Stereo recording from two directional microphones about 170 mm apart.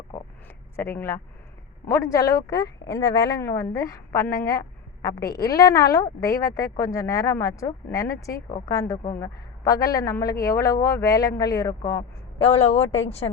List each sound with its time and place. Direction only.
0.4 s a sound: 15° left (ahead or behind)
1.9 s a woman's voice: 15° left (ahead or behind)
12.4 s a woman's voice: 35° left (ahead or behind)